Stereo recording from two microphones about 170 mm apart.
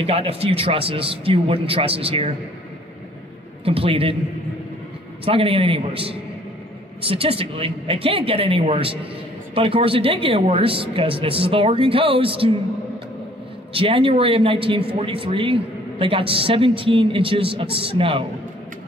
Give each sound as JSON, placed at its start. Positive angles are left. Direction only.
{"t": 0.0, "sound": "a man's voice", "side_deg": -35}
{"t": 3.6, "sound": "a man's voice", "side_deg": -35}
{"t": 5.2, "sound": "a man's voice", "side_deg": -35}
{"t": 13.7, "sound": "a man's voice", "side_deg": -30}